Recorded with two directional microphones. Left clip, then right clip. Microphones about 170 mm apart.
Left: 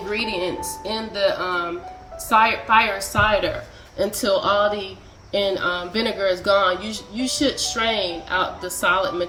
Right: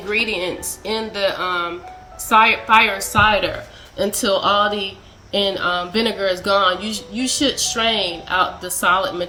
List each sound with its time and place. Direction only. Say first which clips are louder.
0.1 s speech: right 4 dB; 20° right (ahead or behind)